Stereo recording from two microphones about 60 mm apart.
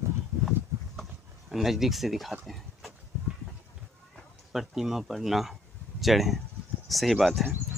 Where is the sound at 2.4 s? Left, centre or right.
Centre.